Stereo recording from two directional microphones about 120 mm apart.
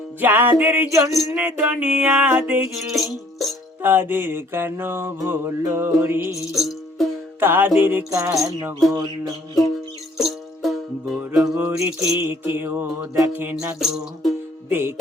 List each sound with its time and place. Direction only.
0.2 s music: 15° right (ahead or behind)
1.4 s music: 10° right (ahead or behind)
2.7 s music: centre (ahead or behind)
3.8 s mantra: 15° right (ahead or behind)
6.6 s music: centre (ahead or behind)
7.3 s music: 20° right (ahead or behind)
7.8 s mantra: 15° right (ahead or behind)
8.9 s a sound: 35° right (ahead or behind)
10.2 s music: centre (ahead or behind); by 13.1 s 20° right (ahead or behind)
13.1 s mantra: 20° right (ahead or behind)
13.7 s music: centre (ahead or behind)
14.7 s mantra: 20° right (ahead or behind)